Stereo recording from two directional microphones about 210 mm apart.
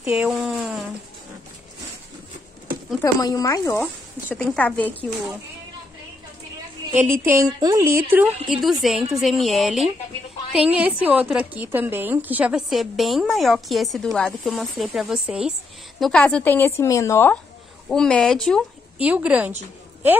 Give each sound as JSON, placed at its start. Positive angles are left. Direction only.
{"t": 0.0, "sound": "speech", "side_deg": -5}
{"t": 3.0, "sound": "a woman's voice", "side_deg": 15}
{"t": 3.7, "sound": "speech", "side_deg": 5}
{"t": 7.0, "sound": "a woman's voice", "side_deg": -10}
{"t": 8.5, "sound": "a woman's voice", "side_deg": 0}